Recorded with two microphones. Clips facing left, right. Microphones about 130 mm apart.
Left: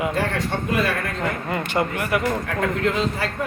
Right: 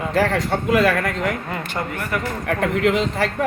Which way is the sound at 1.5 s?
Centre (ahead or behind).